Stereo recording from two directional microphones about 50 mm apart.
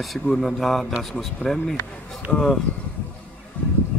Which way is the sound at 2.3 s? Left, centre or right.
Centre.